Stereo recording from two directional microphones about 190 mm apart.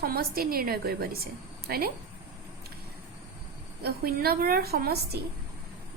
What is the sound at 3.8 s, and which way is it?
A woman's voice, 55° right (ahead or behind).